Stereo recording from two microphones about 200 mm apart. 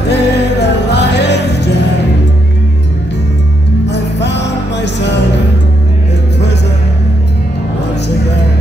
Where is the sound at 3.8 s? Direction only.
60° left (ahead or behind).